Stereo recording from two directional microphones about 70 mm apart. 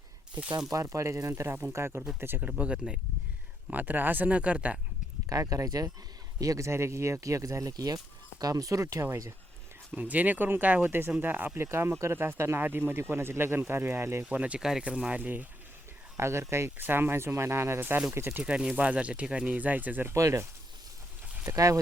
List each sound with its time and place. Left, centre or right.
0.7 s speech: right
2.4 s speech: centre
5.3 s speech: right
9.9 s speech: right
14.3 s speech: centre
16.1 s speech: right
18.3 s speech: centre
20.1 s speech: right